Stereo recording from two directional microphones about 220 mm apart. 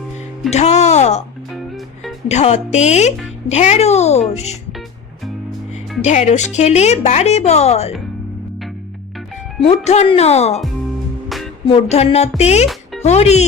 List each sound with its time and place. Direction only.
0.5 s speech: 30° left (ahead or behind)
2.2 s speech: 30° left (ahead or behind)
6.0 s speech: 30° left (ahead or behind)
9.6 s speech: 30° left (ahead or behind)
11.7 s speech: 30° left (ahead or behind)